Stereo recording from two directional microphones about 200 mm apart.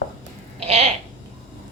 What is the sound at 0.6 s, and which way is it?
Speech, 30° right (ahead or behind).